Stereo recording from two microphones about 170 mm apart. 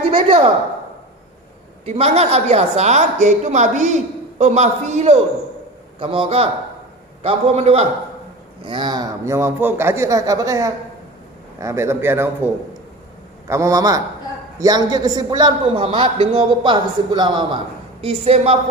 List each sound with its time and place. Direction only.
0.1 s a woman's voice: 35° right (ahead or behind)
1.8 s a woman's voice: 35° right (ahead or behind)
8.6 s a man's voice: 25° right (ahead or behind)
13.5 s a man's voice: 20° right (ahead or behind); by 18.5 s 35° right (ahead or behind)